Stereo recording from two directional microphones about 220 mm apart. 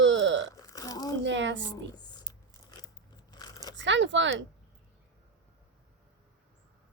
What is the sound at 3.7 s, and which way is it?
Speech, 55° right (ahead or behind).